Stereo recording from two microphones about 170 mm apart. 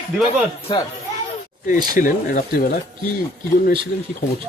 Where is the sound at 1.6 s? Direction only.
50° left (ahead or behind).